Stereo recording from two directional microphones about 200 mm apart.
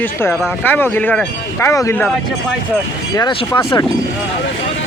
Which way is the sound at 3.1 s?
20° left (ahead or behind).